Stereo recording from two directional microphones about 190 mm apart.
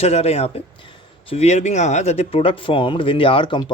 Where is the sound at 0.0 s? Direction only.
35° left (ahead or behind).